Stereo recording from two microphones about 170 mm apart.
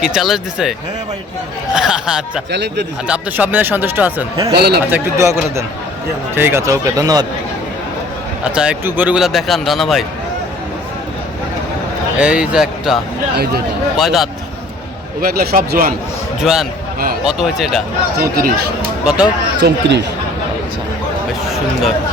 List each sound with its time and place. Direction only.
0.0 s speech: centre (ahead or behind)
1.7 s speech: 5° right (ahead or behind)
2.5 s speech: 90° right
3.1 s speech: 10° right (ahead or behind)
4.5 s a man's voice: 70° right (ahead or behind)
4.9 s speech: 15° right (ahead or behind)
8.5 s speech: 10° right (ahead or behind)
12.2 s speech: 5° right (ahead or behind)
15.2 s speech: 60° right (ahead or behind)
16.4 s speech: centre (ahead or behind)
18.2 s speech: 60° right (ahead or behind)
18.8 s speech: 5° right (ahead or behind)
19.5 s speech: 85° right